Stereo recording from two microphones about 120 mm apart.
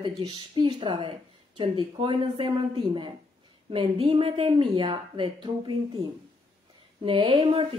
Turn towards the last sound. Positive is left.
turn(degrees=-55)  # may be behind; listen again after turning